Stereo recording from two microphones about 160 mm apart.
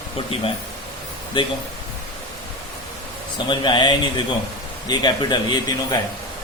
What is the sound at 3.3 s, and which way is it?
A man's voice, 30° left (ahead or behind).